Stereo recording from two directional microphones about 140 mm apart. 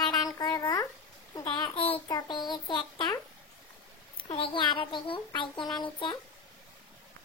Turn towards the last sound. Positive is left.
turn(degrees=35)  # may be behind; listen again after turning